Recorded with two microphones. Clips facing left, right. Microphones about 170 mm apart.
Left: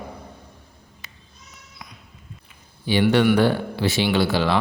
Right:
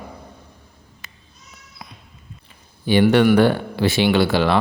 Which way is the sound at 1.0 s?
50° right (ahead or behind).